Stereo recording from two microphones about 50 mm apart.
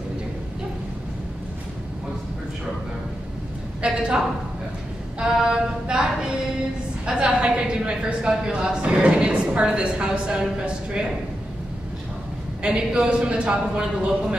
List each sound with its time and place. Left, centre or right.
3.8 s a sound: centre
5.2 s mantra: centre
7.1 s a woman's voice: centre
12.6 s a woman's voice: centre